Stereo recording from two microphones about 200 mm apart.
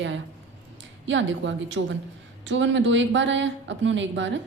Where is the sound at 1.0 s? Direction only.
70° right (ahead or behind).